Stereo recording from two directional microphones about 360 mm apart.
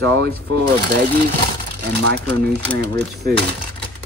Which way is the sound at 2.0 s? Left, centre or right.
Right.